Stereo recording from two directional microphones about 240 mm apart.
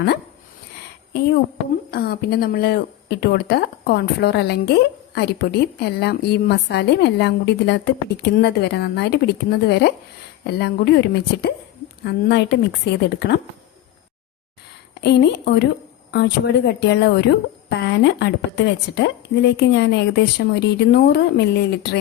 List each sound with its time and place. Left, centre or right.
1.9 s speech: left
15.0 s speech: left